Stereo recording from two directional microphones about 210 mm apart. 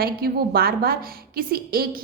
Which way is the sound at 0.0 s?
45° right (ahead or behind).